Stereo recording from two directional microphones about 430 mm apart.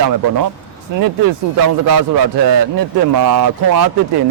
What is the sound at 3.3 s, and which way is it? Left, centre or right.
Speech, right.